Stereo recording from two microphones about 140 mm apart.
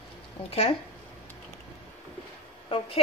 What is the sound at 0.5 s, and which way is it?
Speech, 40° left (ahead or behind).